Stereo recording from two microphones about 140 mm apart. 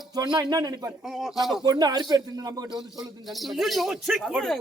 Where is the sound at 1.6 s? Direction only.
30° right (ahead or behind).